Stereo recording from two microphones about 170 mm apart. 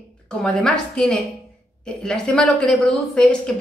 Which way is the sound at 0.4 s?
5° left (ahead or behind).